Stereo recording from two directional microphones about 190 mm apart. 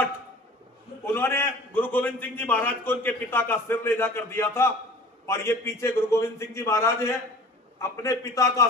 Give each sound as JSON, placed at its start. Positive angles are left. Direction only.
{"t": 1.0, "sound": "a man's voice", "side_deg": 10}